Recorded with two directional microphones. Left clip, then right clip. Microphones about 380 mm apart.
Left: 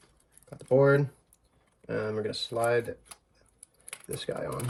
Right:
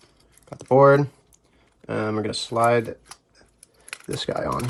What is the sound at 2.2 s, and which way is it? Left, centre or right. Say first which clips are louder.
Speech: right 11 dB; centre.